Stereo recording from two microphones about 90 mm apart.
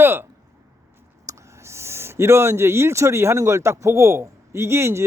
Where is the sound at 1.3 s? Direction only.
35° right (ahead or behind).